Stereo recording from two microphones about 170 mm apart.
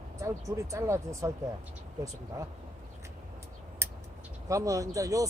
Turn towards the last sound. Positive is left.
turn(degrees=-20)  # may be behind; listen again after turning